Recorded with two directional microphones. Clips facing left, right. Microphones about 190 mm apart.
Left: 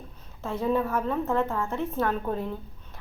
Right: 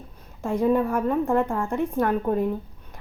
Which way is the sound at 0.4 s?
15° right (ahead or behind).